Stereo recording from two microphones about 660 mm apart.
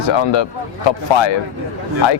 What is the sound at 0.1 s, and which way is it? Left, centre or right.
Speech, left.